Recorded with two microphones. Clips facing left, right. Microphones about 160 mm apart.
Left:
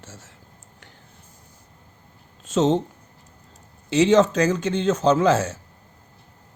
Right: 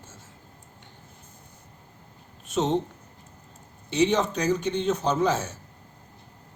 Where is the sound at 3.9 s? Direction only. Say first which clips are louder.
Left 6 dB; 90° left.